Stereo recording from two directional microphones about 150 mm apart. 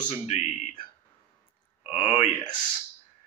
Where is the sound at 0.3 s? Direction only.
45° left (ahead or behind).